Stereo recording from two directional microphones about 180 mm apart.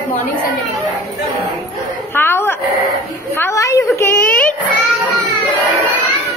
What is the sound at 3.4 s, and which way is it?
A woman's voice, 20° left (ahead or behind).